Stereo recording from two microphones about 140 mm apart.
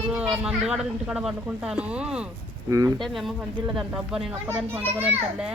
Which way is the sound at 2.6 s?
20° right (ahead or behind).